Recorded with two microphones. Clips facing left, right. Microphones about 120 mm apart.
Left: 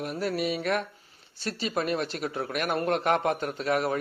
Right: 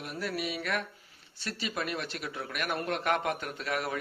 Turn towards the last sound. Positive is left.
turn(degrees=35)  # may be behind; listen again after turning